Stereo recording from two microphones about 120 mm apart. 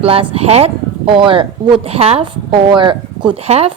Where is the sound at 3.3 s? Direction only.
60° right (ahead or behind).